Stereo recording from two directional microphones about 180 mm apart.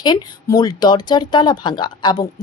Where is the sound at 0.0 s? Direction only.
20° left (ahead or behind).